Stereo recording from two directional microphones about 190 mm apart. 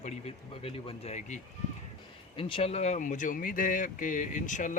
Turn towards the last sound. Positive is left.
turn(degrees=40)  # may be behind; listen again after turning